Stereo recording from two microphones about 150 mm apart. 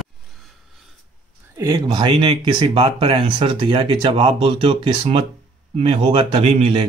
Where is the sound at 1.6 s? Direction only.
25° right (ahead or behind).